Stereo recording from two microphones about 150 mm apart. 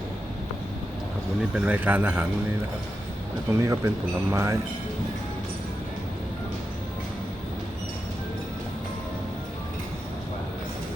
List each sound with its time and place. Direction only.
1.5 s speech: 10° right (ahead or behind)
3.5 s speech: 20° right (ahead or behind)